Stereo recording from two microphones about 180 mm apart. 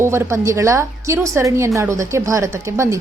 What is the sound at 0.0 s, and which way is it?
A woman's voice, 15° right (ahead or behind).